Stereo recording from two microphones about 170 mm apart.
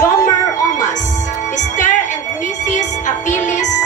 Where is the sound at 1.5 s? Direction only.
45° left (ahead or behind).